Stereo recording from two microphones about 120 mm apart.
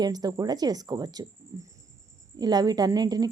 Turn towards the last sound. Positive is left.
turn(degrees=-30)  # may be behind; listen again after turning